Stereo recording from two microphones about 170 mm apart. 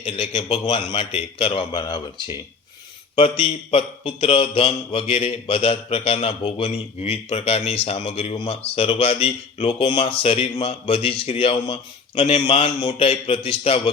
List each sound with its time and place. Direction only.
0.0 s mantra: 30° left (ahead or behind)
0.9 s speech: 30° left (ahead or behind)
3.2 s mantra: 30° left (ahead or behind)